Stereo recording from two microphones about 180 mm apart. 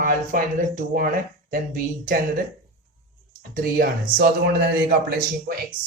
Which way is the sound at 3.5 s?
50° right (ahead or behind).